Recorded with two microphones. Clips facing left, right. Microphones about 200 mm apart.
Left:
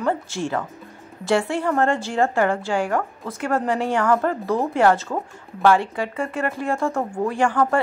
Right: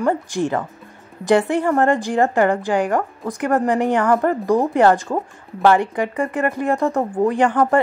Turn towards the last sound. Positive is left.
turn(degrees=-20)  # may be behind; listen again after turning